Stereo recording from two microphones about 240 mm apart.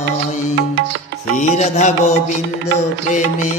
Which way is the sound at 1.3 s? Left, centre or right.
Left.